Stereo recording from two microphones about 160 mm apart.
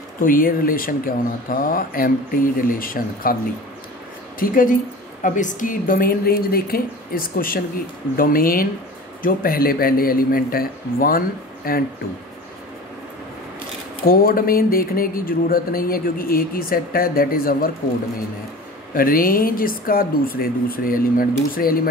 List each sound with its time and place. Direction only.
0.2 s speech: 60° left (ahead or behind)
4.4 s speech: 60° left (ahead or behind)
14.0 s speech: 65° left (ahead or behind)
18.9 s speech: 65° left (ahead or behind)